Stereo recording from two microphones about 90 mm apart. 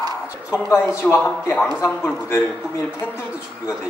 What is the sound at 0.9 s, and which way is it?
A woman's voice, 25° left (ahead or behind).